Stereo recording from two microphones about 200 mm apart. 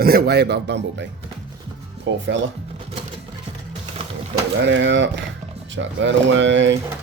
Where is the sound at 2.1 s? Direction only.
65° right (ahead or behind).